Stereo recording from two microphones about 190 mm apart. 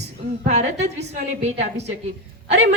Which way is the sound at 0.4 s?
35° right (ahead or behind).